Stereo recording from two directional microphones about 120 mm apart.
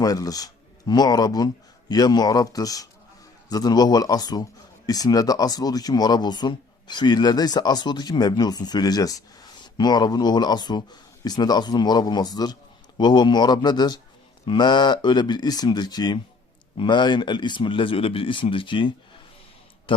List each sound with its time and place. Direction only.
0.0 s speech: 30° left (ahead or behind)